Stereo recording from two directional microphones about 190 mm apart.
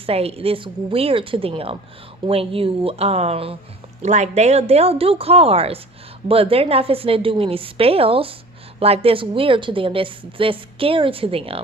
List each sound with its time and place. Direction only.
0.0 s a woman's voice: 30° right (ahead or behind)